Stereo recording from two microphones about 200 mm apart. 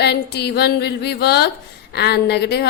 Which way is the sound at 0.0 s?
55° left (ahead or behind).